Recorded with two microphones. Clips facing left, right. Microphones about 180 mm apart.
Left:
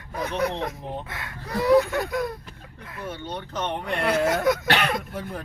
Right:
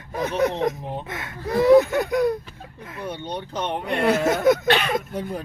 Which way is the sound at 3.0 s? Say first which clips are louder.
Right 3 dB; 15° right (ahead or behind).